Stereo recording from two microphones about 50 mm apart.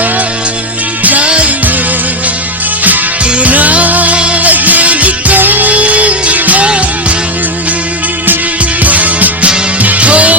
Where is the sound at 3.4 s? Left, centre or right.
Right.